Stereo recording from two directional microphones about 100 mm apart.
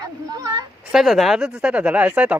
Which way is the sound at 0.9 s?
5° right (ahead or behind).